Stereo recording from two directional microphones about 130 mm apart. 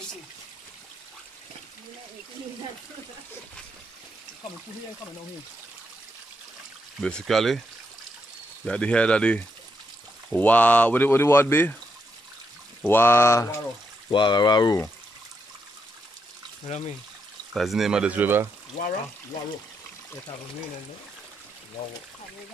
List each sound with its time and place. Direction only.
7.0 s speech: 5° left (ahead or behind)
8.6 s speech: 10° left (ahead or behind)
12.8 s speech: 15° left (ahead or behind)
14.1 s speech: 35° left (ahead or behind)
16.6 s speech: 55° left (ahead or behind)
17.6 s speech: centre (ahead or behind)